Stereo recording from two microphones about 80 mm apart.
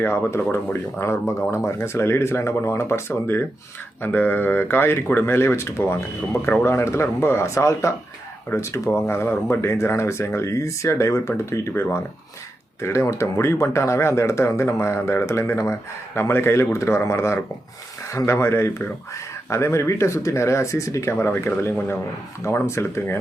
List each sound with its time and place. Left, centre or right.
0.0 s speech: left